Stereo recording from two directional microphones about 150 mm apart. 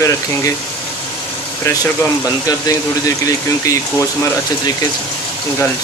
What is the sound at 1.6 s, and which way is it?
Speech, 20° left (ahead or behind).